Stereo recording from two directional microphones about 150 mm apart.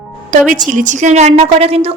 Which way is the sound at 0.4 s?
60° right (ahead or behind).